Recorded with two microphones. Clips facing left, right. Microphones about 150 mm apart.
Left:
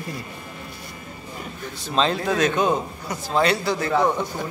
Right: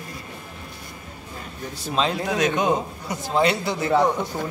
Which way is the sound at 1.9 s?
10° right (ahead or behind).